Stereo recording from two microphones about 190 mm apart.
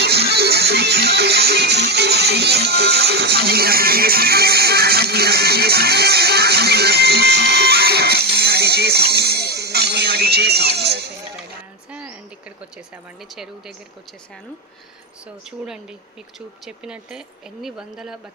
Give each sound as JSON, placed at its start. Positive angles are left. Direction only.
{"t": 0.0, "sound": "music", "side_deg": -60}
{"t": 11.9, "sound": "a sound", "side_deg": -5}
{"t": 13.3, "sound": "speech", "side_deg": 0}
{"t": 15.6, "sound": "speech", "side_deg": -5}